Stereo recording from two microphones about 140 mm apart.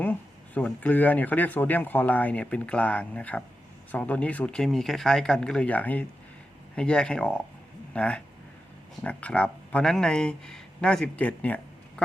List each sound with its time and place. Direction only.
0.0 s speech: 10° left (ahead or behind)